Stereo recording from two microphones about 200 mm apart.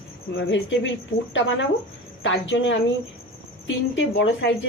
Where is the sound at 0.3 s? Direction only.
65° left (ahead or behind).